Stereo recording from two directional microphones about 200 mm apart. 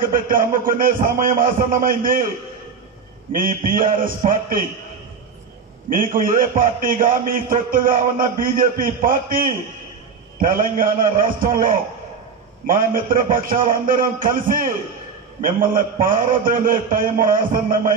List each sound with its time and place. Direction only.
0.0 s a man's voice: 45° right (ahead or behind)
3.3 s a man's voice: 45° right (ahead or behind)
5.9 s a man's voice: 45° right (ahead or behind)